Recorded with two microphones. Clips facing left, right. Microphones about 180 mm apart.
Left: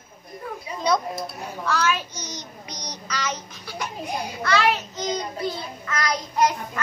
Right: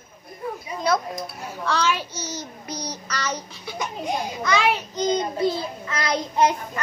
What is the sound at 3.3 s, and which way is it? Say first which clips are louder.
A child's voice: right 2 dB; 15° right (ahead or behind).